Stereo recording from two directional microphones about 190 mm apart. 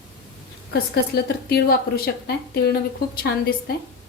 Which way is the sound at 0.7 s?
60° left (ahead or behind).